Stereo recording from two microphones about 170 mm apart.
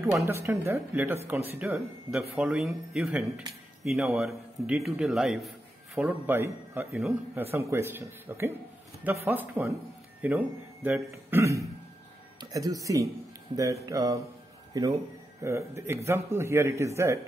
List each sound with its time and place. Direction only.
0.3 s speech: 15° right (ahead or behind)
13.8 s mantra: 20° right (ahead or behind)
14.7 s speech: 20° right (ahead or behind)